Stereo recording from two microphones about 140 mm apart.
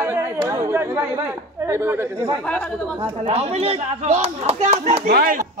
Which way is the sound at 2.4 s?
5° left (ahead or behind).